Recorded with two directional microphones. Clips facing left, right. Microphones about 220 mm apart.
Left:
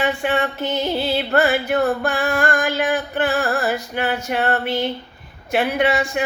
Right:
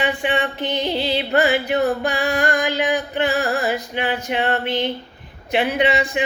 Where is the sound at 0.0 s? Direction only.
15° right (ahead or behind).